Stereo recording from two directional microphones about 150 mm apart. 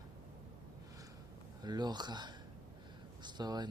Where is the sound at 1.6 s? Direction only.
25° right (ahead or behind).